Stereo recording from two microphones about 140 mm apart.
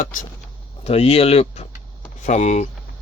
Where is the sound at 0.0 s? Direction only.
65° left (ahead or behind).